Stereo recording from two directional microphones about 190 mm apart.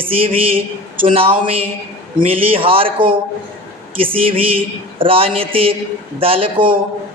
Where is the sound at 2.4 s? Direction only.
30° right (ahead or behind).